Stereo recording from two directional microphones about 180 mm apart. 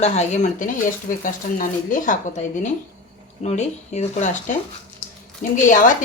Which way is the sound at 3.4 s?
40° left (ahead or behind).